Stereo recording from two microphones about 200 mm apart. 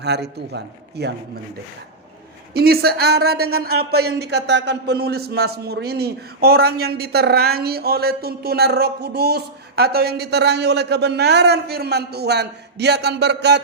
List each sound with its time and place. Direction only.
0.0 s a man's voice: 55° right (ahead or behind)
2.5 s speech: 50° right (ahead or behind)